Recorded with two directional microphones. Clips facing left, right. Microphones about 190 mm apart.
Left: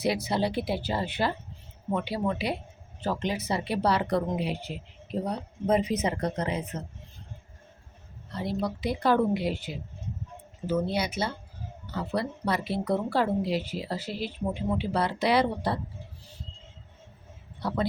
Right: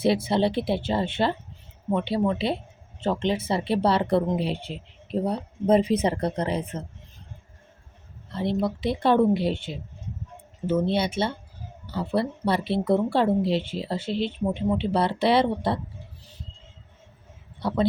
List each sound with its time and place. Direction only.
0.0 s a woman's voice: 25° right (ahead or behind)
8.3 s a woman's voice: 25° right (ahead or behind)